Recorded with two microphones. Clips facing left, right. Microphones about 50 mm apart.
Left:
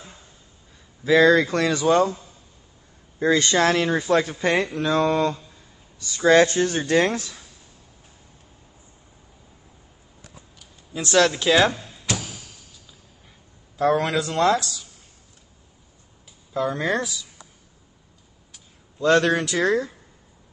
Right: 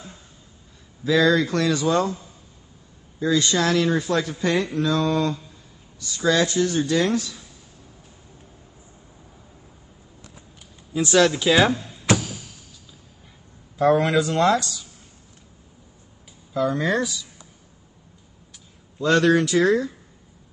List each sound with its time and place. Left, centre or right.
1.0 s speech: left
3.2 s speech: left
10.9 s speech: centre
13.7 s speech: centre
16.5 s speech: centre
18.9 s speech: centre